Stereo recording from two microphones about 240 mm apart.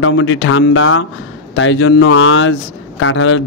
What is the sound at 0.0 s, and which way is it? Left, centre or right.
A man's voice, left.